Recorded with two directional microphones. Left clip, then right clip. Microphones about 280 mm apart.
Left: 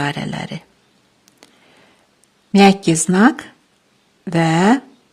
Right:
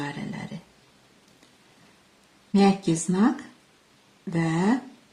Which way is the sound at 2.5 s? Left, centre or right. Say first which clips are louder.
Left 10 dB; left.